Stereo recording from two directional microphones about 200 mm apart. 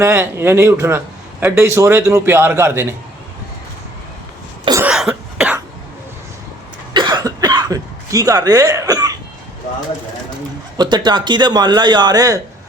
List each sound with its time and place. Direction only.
0.0 s a man's voice: 15° right (ahead or behind)
4.8 s cough: 5° right (ahead or behind)
6.9 s cough: 20° right (ahead or behind)
10.8 s a man's voice: 20° right (ahead or behind)